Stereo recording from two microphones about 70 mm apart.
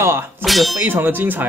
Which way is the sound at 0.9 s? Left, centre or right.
Right.